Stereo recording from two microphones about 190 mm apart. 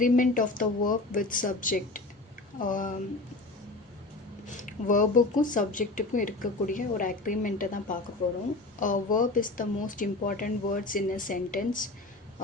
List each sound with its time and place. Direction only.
0.0 s speech: 45° left (ahead or behind)
4.4 s speech: 45° left (ahead or behind)